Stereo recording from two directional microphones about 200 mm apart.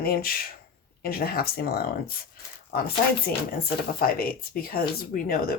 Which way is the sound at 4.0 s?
45° left (ahead or behind).